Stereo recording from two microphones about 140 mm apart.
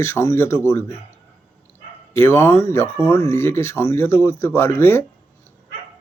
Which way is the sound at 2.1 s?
15° left (ahead or behind).